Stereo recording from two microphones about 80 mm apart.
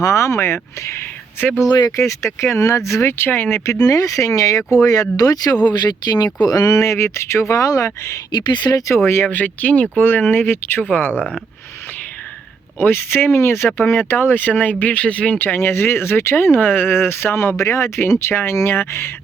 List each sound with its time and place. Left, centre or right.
0.0 s speech: left
1.6 s speech: left
2.0 s speech: left
3.7 s speech: left
5.6 s speech: left
6.8 s speech: left
8.3 s speech: left
9.0 s speech: left
11.1 s speech: centre
12.8 s speech: left